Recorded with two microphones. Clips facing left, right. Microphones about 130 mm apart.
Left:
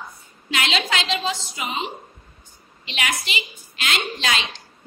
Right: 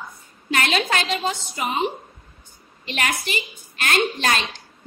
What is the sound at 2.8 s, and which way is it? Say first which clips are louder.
A woman's voice: right 2 dB; 50° right (ahead or behind).